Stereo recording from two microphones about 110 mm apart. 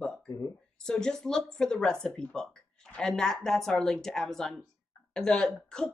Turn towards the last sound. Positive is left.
turn(degrees=5)  # may be behind; listen again after turning